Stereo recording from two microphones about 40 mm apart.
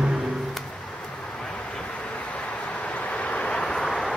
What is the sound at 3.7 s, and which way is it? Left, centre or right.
Vehicle, centre.